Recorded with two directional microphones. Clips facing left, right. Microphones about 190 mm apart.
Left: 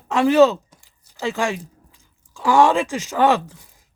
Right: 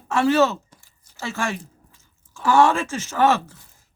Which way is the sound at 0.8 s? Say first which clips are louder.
Left 10 dB; 15° left (ahead or behind).